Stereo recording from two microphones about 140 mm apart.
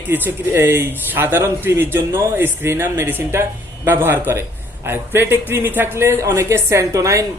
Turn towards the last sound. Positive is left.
turn(degrees=-25)  # may be behind; listen again after turning